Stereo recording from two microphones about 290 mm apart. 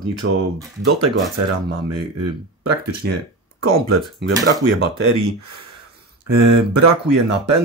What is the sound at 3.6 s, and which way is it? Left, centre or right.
Speech, right.